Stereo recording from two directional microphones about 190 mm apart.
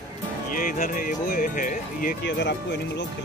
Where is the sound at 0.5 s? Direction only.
45° left (ahead or behind).